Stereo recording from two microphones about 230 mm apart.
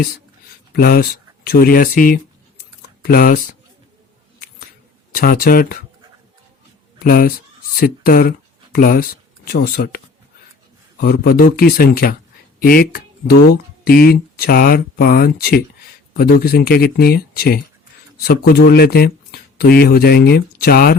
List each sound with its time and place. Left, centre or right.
0.7 s speech: left
5.1 s speech: left
7.0 s speech: left
11.0 s speech: left